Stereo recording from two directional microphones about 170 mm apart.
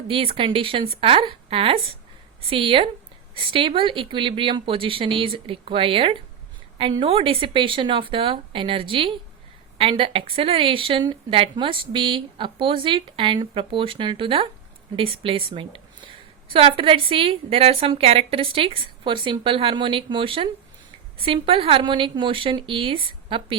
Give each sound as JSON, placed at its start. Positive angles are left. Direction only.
{"t": 0.1, "sound": "speech", "side_deg": -30}